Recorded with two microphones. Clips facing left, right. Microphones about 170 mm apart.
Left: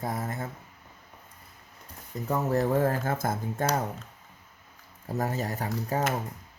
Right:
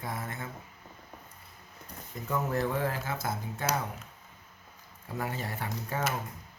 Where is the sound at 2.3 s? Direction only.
40° left (ahead or behind).